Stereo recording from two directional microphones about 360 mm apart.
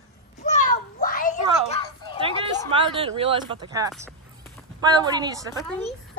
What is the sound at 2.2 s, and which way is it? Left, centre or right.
Speech, centre.